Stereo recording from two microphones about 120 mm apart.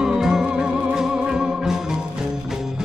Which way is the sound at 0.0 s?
5° right (ahead or behind).